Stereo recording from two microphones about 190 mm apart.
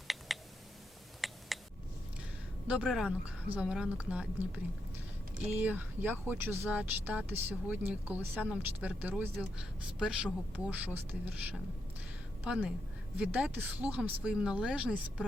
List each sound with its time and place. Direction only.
0.3 s a sound: centre (ahead or behind)
2.6 s a woman's voice: 5° right (ahead or behind)
10.5 s a woman's voice: 10° right (ahead or behind)